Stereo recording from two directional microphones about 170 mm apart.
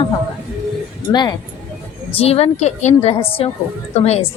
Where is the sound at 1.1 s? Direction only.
25° left (ahead or behind).